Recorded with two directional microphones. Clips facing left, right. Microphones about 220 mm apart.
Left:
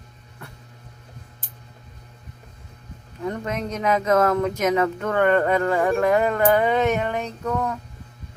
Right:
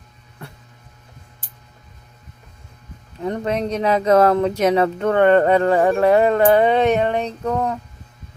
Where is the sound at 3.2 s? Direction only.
30° right (ahead or behind).